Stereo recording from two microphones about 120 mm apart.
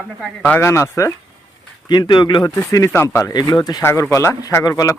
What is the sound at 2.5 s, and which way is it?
Speech, 25° left (ahead or behind).